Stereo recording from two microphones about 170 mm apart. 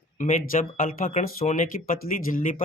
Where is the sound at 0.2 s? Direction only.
50° left (ahead or behind).